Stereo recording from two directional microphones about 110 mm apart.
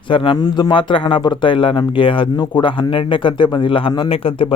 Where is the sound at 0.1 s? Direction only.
50° left (ahead or behind).